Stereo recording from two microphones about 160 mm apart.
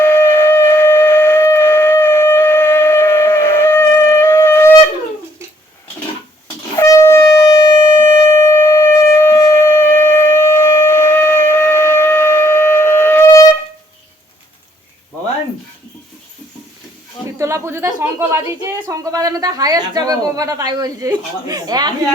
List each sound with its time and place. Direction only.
0.0 s shofar: 15° left (ahead or behind)
6.7 s shofar: 20° left (ahead or behind)
17.3 s a sound: 20° right (ahead or behind)
17.8 s speech: 15° right (ahead or behind)